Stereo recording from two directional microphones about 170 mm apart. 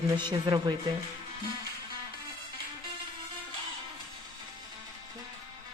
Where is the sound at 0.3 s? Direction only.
25° right (ahead or behind).